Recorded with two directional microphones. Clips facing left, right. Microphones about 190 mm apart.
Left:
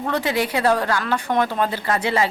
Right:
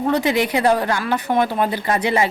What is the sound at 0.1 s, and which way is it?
Speech, 15° right (ahead or behind).